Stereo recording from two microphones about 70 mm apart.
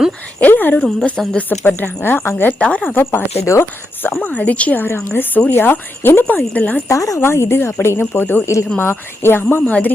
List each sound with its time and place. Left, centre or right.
0.3 s a sound: left
0.8 s speech: centre
1.4 s speech: left
2.6 s speech: centre
2.9 s speech: left
4.9 s speech: left
6.8 s speech: left
7.2 s speech: left
9.6 s speech: left